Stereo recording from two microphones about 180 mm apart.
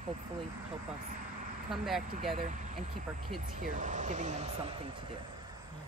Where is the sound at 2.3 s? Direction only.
45° right (ahead or behind).